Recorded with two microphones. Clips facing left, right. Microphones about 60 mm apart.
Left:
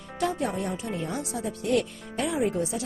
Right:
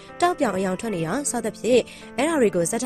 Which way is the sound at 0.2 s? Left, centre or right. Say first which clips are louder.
Right 7 dB; right.